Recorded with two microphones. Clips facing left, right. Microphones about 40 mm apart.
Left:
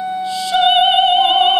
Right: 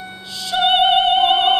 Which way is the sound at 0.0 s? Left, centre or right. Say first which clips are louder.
Left 11 dB; centre.